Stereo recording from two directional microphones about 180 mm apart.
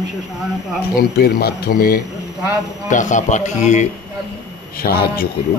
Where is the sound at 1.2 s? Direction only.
60° left (ahead or behind); by 3.9 s 40° left (ahead or behind).